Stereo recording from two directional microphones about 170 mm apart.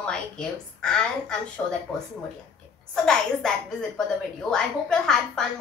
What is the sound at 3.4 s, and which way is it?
A woman's voice, centre (ahead or behind).